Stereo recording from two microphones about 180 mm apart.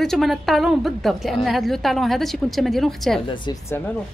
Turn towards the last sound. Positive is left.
turn(degrees=20)  # may be behind; listen again after turning